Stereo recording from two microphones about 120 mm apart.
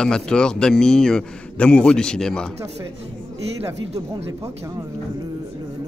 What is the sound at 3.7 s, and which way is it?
Speech, 25° right (ahead or behind).